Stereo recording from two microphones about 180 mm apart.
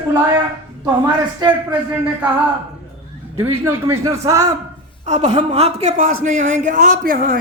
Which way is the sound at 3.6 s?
15° right (ahead or behind).